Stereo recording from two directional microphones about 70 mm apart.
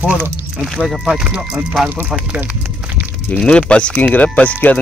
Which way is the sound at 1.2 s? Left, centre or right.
Centre.